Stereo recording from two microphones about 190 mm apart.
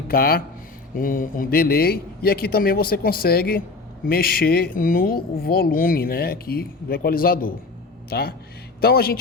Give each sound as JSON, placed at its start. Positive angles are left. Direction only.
{"t": 0.1, "sound": "a man's voice", "side_deg": 50}